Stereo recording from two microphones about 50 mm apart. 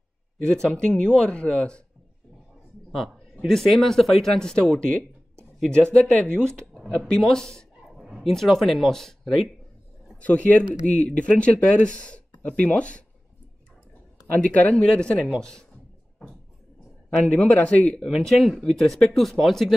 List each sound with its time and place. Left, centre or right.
0.5 s speech: centre
3.4 s speech: centre
10.2 s speech: left
14.4 s speech: left
17.3 s speech: left
18.0 s speech: centre